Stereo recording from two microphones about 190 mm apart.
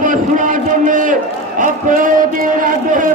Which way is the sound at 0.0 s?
45° right (ahead or behind).